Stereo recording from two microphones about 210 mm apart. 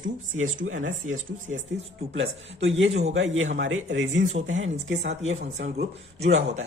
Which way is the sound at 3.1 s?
65° right (ahead or behind).